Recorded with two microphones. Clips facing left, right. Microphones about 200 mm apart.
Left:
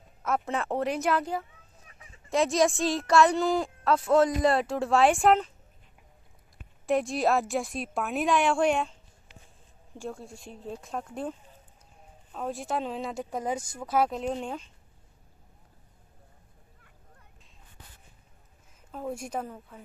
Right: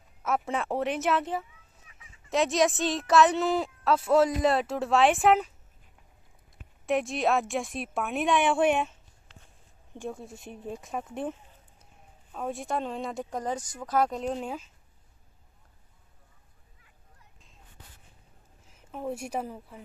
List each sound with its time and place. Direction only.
0.2 s a woman's voice: 5° right (ahead or behind)
1.5 s chicken: 40° left (ahead or behind)
2.2 s a woman's voice: centre (ahead or behind)
6.9 s a woman's voice: centre (ahead or behind)
10.9 s speech: 5° right (ahead or behind)
12.3 s a woman's voice: centre (ahead or behind)
18.9 s speech: 5° right (ahead or behind)